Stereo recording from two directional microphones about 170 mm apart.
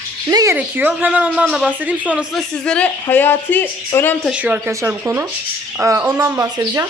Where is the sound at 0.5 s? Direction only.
10° right (ahead or behind).